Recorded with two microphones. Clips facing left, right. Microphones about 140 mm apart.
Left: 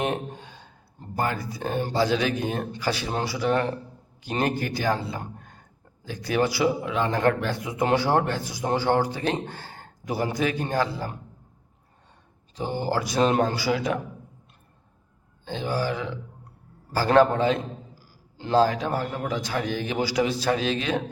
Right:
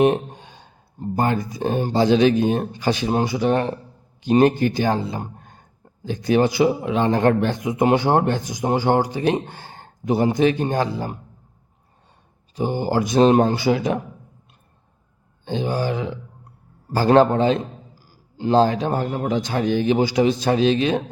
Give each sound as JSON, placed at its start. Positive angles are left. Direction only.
{"t": 0.0, "sound": "a sound", "side_deg": -15}
{"t": 1.9, "sound": "a man's voice", "side_deg": -25}
{"t": 12.5, "sound": "speech", "side_deg": -15}
{"t": 15.4, "sound": "speech", "side_deg": -20}